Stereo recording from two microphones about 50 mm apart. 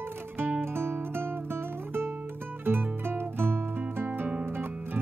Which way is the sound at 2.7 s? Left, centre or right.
Right.